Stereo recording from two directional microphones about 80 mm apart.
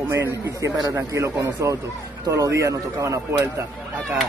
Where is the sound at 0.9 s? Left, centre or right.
Right.